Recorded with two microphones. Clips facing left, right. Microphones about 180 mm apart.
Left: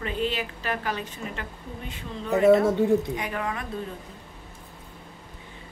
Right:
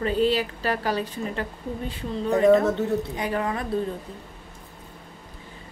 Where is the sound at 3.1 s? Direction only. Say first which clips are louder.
Right 4 dB; 35° right (ahead or behind).